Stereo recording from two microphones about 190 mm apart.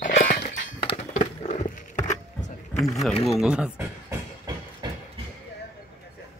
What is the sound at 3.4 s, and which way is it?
Speech, 5° right (ahead or behind).